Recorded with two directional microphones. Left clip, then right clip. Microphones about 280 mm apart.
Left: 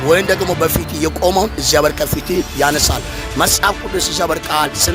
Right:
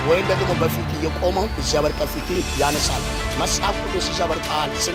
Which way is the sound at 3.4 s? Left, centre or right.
Left.